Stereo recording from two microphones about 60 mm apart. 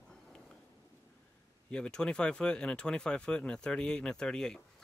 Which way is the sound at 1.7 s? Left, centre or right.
Centre.